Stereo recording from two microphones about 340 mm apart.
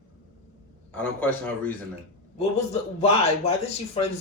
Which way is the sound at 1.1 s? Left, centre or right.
Centre.